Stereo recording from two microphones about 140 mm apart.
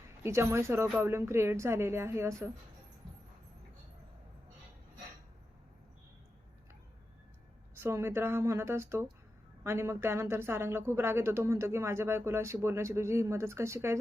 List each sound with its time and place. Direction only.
0.2 s speech: 20° right (ahead or behind)
7.8 s speech: 20° right (ahead or behind)